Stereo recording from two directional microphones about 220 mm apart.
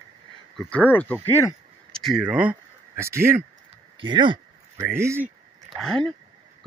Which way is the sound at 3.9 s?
20° right (ahead or behind).